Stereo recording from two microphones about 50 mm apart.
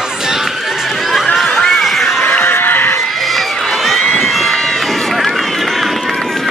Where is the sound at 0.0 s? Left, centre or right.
Centre.